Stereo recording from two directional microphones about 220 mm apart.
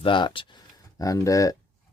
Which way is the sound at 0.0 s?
20° left (ahead or behind).